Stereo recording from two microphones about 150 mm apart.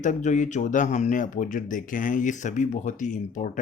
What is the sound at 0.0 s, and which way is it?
Speech, 55° left (ahead or behind).